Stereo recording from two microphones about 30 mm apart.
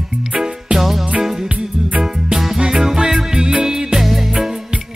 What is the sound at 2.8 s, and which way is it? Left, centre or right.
Music, centre.